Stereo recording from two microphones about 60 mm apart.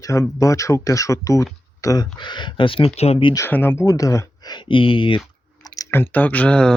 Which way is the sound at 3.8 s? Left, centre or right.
Left.